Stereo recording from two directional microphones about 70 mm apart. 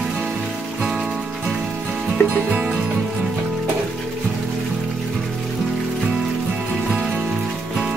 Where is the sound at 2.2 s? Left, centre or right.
Left.